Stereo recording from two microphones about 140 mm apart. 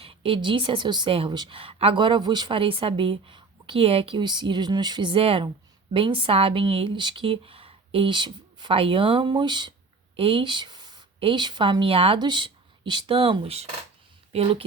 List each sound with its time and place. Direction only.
0.0 s a woman's voice: 40° right (ahead or behind)